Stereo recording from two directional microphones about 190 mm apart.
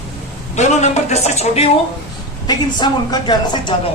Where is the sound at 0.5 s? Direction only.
35° left (ahead or behind).